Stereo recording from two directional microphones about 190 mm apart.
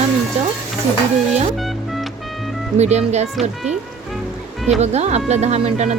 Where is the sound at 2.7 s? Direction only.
35° right (ahead or behind).